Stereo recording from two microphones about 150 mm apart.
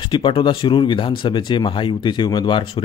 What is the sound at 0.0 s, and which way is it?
A man's voice, 35° left (ahead or behind).